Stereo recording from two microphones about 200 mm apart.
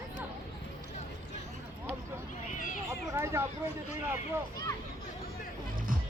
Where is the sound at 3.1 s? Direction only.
15° right (ahead or behind).